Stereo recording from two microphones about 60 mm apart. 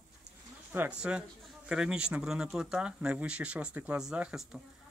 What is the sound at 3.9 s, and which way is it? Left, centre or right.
Speech, centre.